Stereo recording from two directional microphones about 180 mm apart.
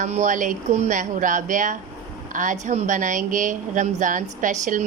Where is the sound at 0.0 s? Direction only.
45° right (ahead or behind).